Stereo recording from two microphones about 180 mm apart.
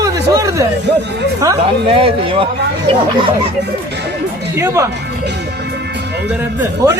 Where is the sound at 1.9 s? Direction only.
30° right (ahead or behind).